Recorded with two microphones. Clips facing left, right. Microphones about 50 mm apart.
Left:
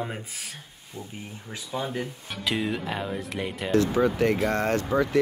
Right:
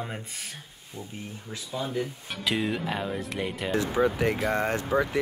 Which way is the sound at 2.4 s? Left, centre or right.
Centre.